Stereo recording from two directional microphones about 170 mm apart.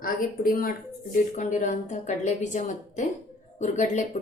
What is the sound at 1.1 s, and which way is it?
A woman's voice, 45° left (ahead or behind).